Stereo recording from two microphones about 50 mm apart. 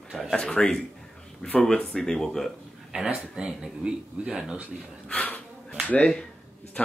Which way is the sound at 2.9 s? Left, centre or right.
Right.